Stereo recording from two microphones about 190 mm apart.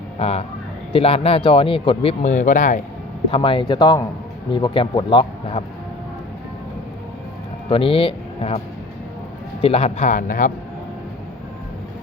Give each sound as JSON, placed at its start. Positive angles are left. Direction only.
{"t": 0.2, "sound": "speech", "side_deg": 30}
{"t": 3.3, "sound": "a man's voice", "side_deg": 25}
{"t": 7.7, "sound": "speech", "side_deg": 30}